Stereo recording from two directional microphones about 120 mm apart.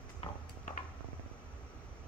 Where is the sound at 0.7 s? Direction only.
85° left.